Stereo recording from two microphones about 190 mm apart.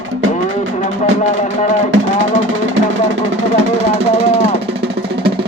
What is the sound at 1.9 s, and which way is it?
Music, 90° right.